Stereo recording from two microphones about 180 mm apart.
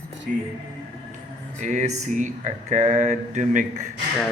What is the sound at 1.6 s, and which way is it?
Speech, 40° right (ahead or behind).